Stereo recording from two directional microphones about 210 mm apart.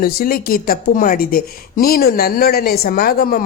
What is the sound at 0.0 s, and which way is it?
A woman's voice, 45° left (ahead or behind).